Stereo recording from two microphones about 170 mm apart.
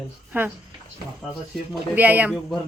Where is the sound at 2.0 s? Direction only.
10° right (ahead or behind).